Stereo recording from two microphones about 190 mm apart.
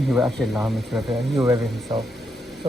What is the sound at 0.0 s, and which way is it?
Speech, centre (ahead or behind).